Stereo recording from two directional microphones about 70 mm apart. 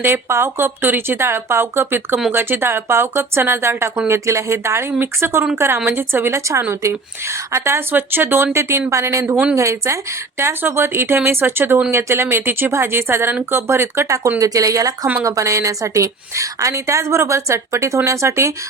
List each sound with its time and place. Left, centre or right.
0.0 s a woman's voice: right
7.9 s a woman's voice: right
8.9 s a woman's voice: right
9.2 s speech: centre
9.6 s a woman's voice: right
14.3 s a woman's voice: right